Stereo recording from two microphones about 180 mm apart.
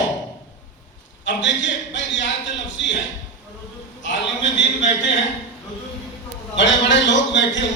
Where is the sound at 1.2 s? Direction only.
90° left.